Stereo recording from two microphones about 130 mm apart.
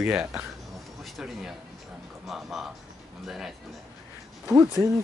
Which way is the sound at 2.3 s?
5° right (ahead or behind).